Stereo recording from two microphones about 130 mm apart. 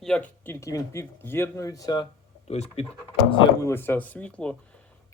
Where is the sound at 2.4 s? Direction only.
55° left (ahead or behind).